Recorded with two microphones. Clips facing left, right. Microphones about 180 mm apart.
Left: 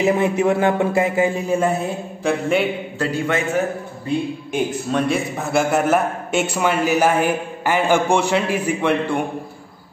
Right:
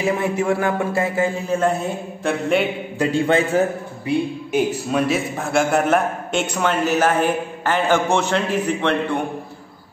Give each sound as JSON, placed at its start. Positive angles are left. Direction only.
{"t": 0.0, "sound": "a man's voice", "side_deg": 20}
{"t": 1.8, "sound": "a sound", "side_deg": 0}
{"t": 3.3, "sound": "a man's voice", "side_deg": -30}
{"t": 4.0, "sound": "a man's voice", "side_deg": -5}